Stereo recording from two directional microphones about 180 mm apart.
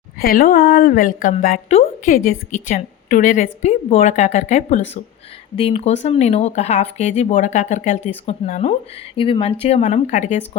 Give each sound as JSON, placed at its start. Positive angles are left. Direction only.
{"t": 0.2, "sound": "a woman's voice", "side_deg": 55}